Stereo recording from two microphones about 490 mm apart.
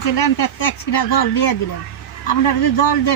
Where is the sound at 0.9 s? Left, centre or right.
Left.